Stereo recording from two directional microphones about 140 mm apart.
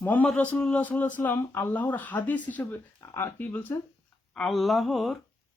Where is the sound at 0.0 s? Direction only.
10° left (ahead or behind).